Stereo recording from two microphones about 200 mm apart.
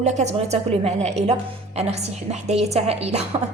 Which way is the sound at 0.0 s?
35° right (ahead or behind).